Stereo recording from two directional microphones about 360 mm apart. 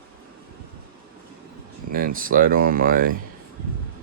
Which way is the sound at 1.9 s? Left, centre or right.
Right.